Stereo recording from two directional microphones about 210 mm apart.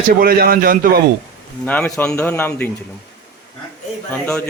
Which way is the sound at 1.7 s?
5° left (ahead or behind).